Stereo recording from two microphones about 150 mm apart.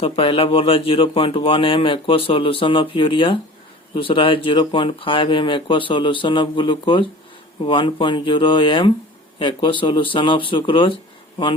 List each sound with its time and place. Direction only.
0.0 s speech: 40° left (ahead or behind)